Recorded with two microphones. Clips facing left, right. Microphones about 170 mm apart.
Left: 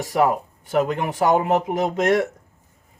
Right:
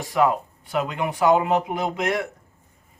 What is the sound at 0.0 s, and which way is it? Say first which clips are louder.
Speech: left 1 dB; 40° left (ahead or behind).